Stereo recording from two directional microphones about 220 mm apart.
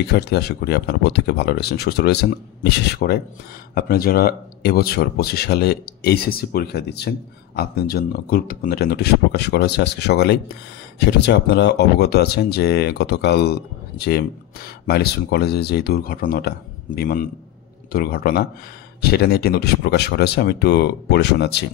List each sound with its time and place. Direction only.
0.0 s speech: 50° left (ahead or behind)